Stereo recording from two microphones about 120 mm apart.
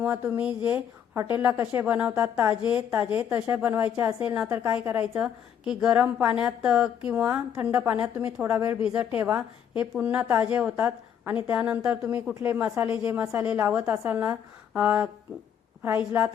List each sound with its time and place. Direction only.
0.0 s a woman's voice: 15° right (ahead or behind)